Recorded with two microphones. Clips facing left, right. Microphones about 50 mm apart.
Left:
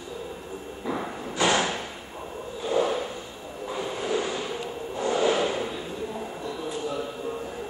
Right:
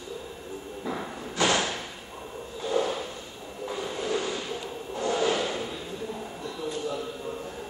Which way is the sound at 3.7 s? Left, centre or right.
Left.